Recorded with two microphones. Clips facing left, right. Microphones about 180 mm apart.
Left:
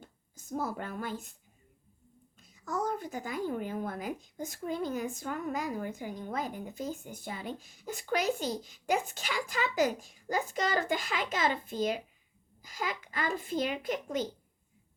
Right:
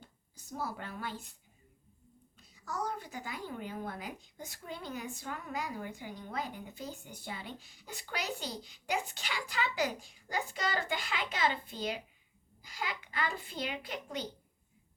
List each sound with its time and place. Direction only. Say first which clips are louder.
0.0 s speech: left 3 dB; 50° left (ahead or behind)
2.4 s speech: left 4 dB; 45° left (ahead or behind)